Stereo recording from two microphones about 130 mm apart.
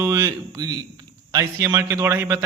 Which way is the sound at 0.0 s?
20° right (ahead or behind).